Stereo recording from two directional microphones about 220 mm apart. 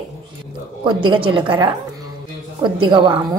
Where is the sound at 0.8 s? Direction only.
20° right (ahead or behind).